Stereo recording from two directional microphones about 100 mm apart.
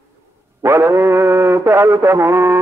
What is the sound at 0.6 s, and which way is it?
Mantra, 30° right (ahead or behind).